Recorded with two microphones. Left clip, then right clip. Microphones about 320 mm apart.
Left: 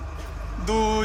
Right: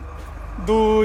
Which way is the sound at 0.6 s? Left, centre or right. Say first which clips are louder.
Right 6 dB; centre.